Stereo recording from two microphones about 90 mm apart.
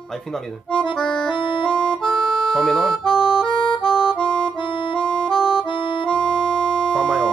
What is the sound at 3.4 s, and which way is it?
Music, 70° left (ahead or behind).